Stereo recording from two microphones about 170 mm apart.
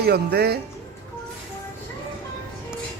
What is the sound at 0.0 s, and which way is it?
Speech, 70° right (ahead or behind).